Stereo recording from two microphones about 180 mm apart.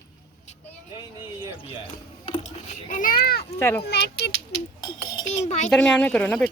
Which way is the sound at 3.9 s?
70° left (ahead or behind).